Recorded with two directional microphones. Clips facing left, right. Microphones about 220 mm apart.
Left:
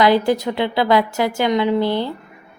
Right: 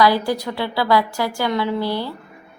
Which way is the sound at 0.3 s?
20° left (ahead or behind).